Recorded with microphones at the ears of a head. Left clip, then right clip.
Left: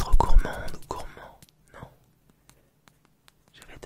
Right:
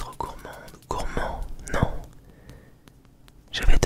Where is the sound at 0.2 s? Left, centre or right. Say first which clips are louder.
Left 8 dB; left.